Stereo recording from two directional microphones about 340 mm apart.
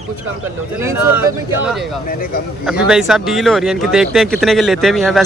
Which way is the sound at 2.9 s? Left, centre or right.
Centre.